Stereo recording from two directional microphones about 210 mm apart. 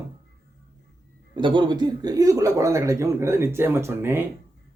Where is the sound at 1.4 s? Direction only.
20° right (ahead or behind).